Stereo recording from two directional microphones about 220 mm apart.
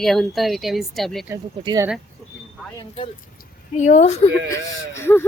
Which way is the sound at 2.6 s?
5° right (ahead or behind).